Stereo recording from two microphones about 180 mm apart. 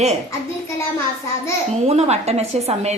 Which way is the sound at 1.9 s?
35° right (ahead or behind).